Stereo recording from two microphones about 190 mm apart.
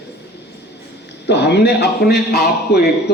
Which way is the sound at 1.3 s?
60° left (ahead or behind).